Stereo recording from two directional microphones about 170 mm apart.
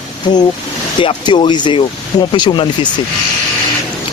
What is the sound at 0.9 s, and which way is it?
Speech, 25° left (ahead or behind).